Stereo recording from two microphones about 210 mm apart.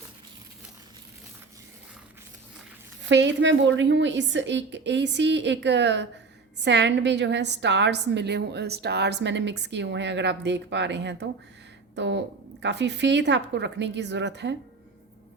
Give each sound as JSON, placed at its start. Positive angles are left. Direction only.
{"t": 3.0, "sound": "a woman's voice", "side_deg": -60}